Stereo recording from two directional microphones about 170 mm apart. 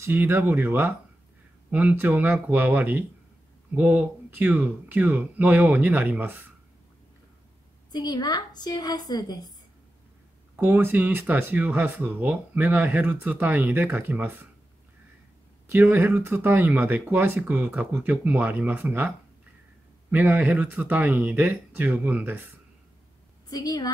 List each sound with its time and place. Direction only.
0.0 s speech: 15° right (ahead or behind)
7.9 s a woman's voice: 25° left (ahead or behind)
10.5 s speech: 10° right (ahead or behind)
15.7 s speech: 15° right (ahead or behind)
23.5 s a woman's voice: 20° left (ahead or behind)